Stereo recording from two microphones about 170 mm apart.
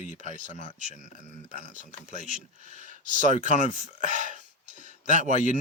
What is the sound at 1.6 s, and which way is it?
Speech, 45° right (ahead or behind).